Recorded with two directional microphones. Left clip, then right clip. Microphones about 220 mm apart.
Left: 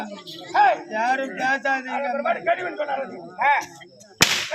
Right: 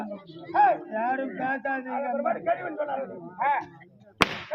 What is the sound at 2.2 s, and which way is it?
A man's voice, 35° right (ahead or behind).